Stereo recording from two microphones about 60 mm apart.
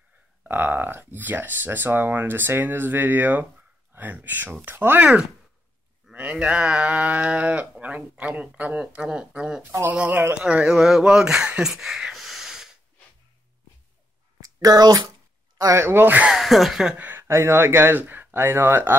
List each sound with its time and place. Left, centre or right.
0.4 s speech: right
6.0 s a sound: centre
6.4 s speech: centre
9.8 s speech: right
10.4 s speech: centre
12.1 s snort: centre
14.4 s speech: right
15.7 s speech: right
16.3 s speech: centre
16.9 s a sound: right
17.2 s speech: right